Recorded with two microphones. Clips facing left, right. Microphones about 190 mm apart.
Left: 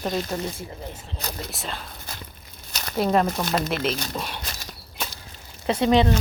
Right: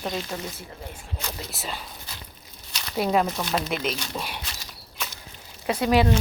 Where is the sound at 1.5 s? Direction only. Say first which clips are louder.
Left 1 dB; 5° right (ahead or behind).